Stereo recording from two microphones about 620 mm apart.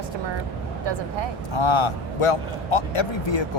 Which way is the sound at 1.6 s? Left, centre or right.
Left.